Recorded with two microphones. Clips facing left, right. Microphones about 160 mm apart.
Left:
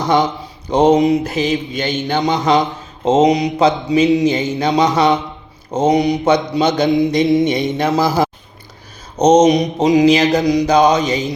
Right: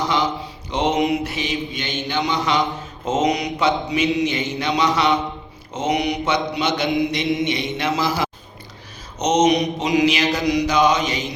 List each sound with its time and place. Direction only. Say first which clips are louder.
0.7 s mantra: left 8 dB; 40° left (ahead or behind)
3.0 s mantra: left 8 dB; 30° left (ahead or behind)